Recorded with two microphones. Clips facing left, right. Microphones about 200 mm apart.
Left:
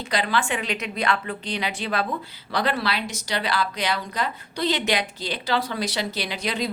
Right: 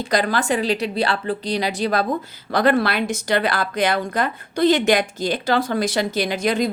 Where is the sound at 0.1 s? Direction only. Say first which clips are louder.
Right 4 dB; 45° right (ahead or behind).